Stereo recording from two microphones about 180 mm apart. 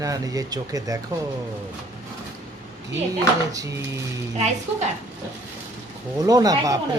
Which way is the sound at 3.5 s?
20° right (ahead or behind).